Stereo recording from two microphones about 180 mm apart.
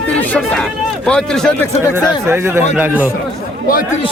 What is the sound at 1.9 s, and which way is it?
Speech, 15° right (ahead or behind).